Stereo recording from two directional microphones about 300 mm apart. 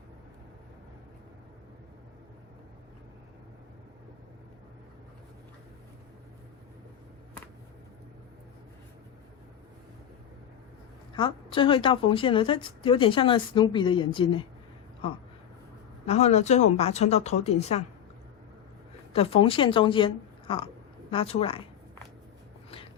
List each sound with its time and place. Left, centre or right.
11.1 s a woman's voice: centre
16.0 s a woman's voice: left
19.1 s a woman's voice: centre